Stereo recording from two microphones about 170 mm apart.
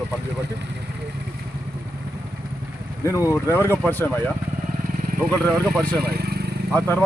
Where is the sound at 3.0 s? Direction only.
15° left (ahead or behind).